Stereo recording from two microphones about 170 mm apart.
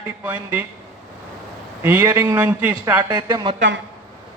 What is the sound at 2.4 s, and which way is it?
Speech, 10° right (ahead or behind).